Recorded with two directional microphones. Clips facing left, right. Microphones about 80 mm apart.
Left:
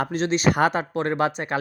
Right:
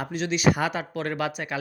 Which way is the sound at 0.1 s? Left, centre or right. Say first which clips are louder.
Left 2 dB; left.